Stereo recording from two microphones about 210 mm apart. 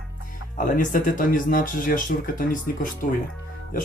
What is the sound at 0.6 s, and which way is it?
Speech, 40° left (ahead or behind).